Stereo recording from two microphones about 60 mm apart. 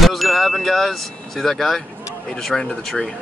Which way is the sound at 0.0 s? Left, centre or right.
Centre.